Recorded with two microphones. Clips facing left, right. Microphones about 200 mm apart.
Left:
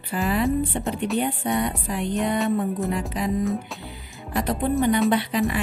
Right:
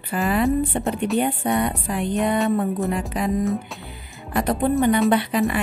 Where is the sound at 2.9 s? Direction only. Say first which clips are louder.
Right 2 dB; 55° right (ahead or behind).